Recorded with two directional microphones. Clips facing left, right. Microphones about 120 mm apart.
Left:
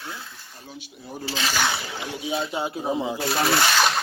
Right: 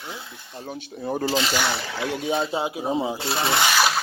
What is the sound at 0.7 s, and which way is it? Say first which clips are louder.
Speech: right 10 dB; 55° right (ahead or behind).